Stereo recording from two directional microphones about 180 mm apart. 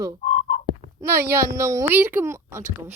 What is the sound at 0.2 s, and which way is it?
Frog, 35° left (ahead or behind).